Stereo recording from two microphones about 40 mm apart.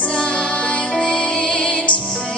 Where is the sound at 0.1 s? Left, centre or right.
Left.